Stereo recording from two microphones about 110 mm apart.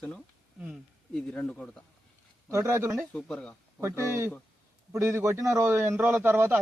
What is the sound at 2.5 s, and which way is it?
Speech, 25° right (ahead or behind).